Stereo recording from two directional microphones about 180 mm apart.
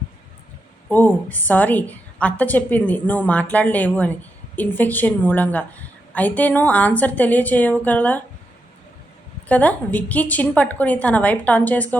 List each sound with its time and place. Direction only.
0.9 s a woman's voice: 10° left (ahead or behind)
9.5 s a woman's voice: 10° left (ahead or behind)